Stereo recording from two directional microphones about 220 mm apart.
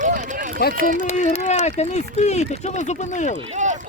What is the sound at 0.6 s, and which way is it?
Speech, 45° left (ahead or behind).